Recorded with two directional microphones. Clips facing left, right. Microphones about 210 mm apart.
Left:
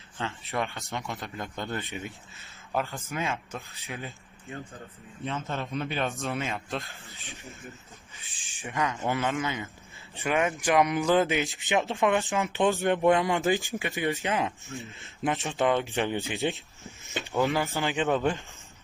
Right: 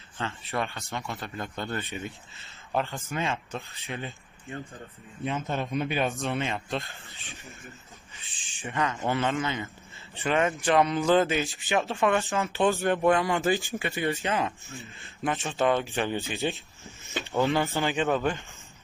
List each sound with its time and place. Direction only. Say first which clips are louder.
0.2 s speech: even; 15° left (ahead or behind)
2.7 s speech: right 1 dB; centre (ahead or behind)
5.2 s a man's voice: right 3 dB; 15° right (ahead or behind)
6.1 s speech: right 2 dB; centre (ahead or behind)
8.2 s speech: right 2 dB; 15° left (ahead or behind)
14.7 s speech: left 4 dB; centre (ahead or behind)
15.0 s speech: even; 15° left (ahead or behind)
17.4 s speech: right 1 dB; 5° left (ahead or behind)
17.8 s speech: right 1 dB; 15° left (ahead or behind)